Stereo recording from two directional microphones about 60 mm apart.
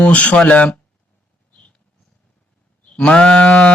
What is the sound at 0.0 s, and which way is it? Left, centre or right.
Speech, left.